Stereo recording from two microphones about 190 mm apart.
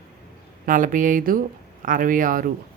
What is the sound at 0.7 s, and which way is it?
Speech, 45° right (ahead or behind).